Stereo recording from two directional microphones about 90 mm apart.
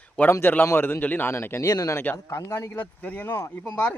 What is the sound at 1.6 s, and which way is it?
Speech, 40° left (ahead or behind).